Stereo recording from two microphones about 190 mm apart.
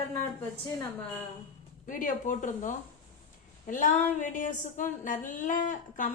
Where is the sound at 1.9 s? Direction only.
45° left (ahead or behind).